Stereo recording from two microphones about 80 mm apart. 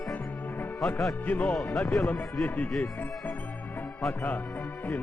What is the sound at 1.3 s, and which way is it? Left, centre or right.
Speech, centre.